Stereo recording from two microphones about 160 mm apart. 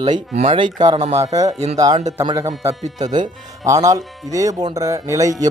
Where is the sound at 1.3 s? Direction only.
20° right (ahead or behind).